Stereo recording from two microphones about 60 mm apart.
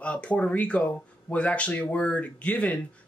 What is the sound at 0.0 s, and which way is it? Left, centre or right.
Speech, centre.